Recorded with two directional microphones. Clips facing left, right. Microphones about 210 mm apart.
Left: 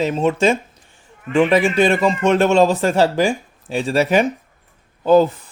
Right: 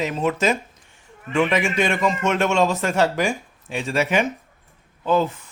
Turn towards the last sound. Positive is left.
turn(degrees=35)  # may be behind; listen again after turning